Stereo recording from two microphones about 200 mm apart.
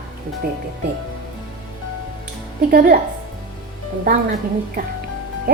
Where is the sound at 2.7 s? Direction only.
45° right (ahead or behind).